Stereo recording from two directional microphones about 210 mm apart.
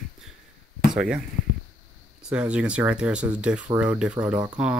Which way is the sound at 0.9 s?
5° right (ahead or behind).